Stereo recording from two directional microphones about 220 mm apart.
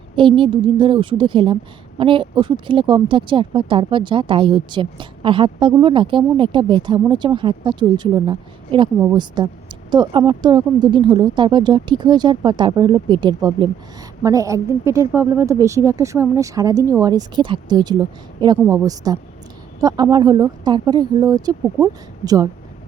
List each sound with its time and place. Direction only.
0.2 s a woman's voice: 25° right (ahead or behind)